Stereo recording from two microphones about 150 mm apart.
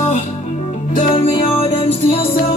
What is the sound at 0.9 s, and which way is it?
Music, 40° left (ahead or behind).